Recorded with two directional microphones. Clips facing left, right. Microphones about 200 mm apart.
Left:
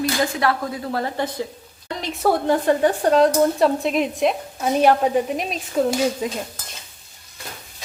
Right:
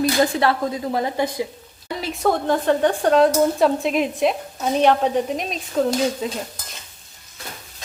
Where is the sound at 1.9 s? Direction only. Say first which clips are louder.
Right 1 dB; 5° right (ahead or behind).